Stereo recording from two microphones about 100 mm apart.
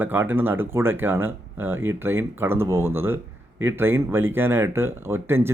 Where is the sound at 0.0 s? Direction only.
20° right (ahead or behind).